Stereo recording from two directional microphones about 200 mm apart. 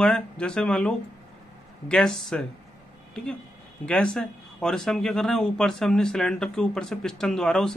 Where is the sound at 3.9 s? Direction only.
5° left (ahead or behind).